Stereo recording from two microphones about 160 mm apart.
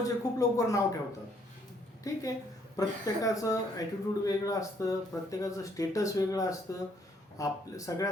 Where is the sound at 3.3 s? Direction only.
20° left (ahead or behind).